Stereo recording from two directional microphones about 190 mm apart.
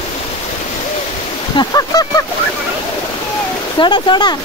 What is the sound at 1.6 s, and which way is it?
Goose, 20° left (ahead or behind).